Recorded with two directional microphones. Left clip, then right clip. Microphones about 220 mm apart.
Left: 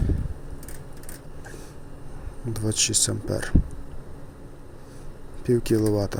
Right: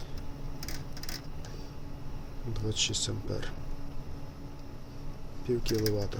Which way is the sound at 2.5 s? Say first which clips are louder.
Left 7 dB; 35° left (ahead or behind).